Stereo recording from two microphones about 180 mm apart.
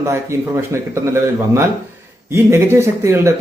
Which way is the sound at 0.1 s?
15° right (ahead or behind).